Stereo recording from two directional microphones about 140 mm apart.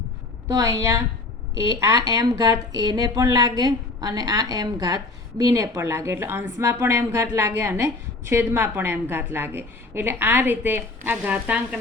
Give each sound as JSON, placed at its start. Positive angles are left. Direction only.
{"t": 0.4, "sound": "a woman's voice", "side_deg": -25}